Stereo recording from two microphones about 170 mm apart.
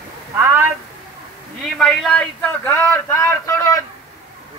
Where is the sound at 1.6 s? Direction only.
Centre (ahead or behind); by 3.8 s 15° left (ahead or behind).